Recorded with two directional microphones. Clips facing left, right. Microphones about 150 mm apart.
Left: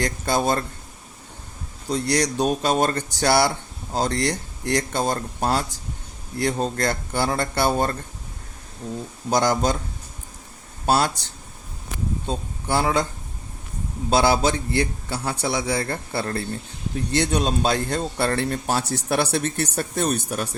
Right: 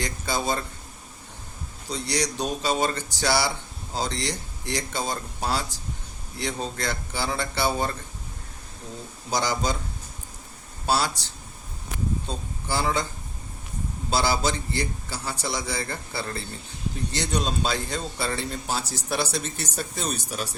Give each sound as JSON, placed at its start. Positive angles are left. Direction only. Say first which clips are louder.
{"t": 0.0, "sound": "speech", "louder": "left 6 dB", "side_deg": 55}
{"t": 1.9, "sound": "speech", "louder": "left 6 dB", "side_deg": 55}
{"t": 9.3, "sound": "speech", "louder": "left 6 dB", "side_deg": 55}
{"t": 10.8, "sound": "speech", "louder": "left 4 dB", "side_deg": 55}
{"t": 12.6, "sound": "speech", "louder": "left 5 dB", "side_deg": 60}
{"t": 14.1, "sound": "speech", "louder": "left 6 dB", "side_deg": 55}